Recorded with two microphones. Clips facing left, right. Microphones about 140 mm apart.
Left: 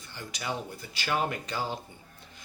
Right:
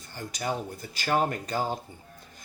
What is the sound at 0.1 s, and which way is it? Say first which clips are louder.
Speech: right 4 dB; 45° right (ahead or behind).